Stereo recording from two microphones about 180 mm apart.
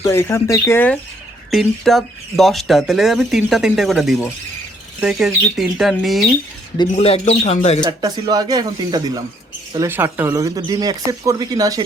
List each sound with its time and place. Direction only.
0.1 s speech: 15° left (ahead or behind)
1.5 s speech: centre (ahead or behind)
6.9 s speech: 35° left (ahead or behind)
7.9 s speech: 20° right (ahead or behind)